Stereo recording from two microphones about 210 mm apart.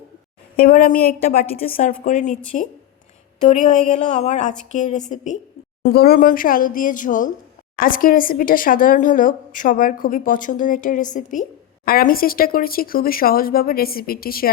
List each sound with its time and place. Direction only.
0.5 s speech: 45° left (ahead or behind)
5.8 s speech: 45° left (ahead or behind)